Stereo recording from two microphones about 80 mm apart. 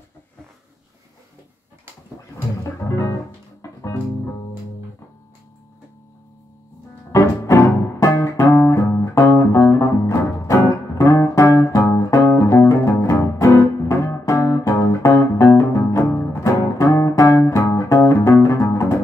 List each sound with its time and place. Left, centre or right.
2.3 s music: left
7.1 s music: left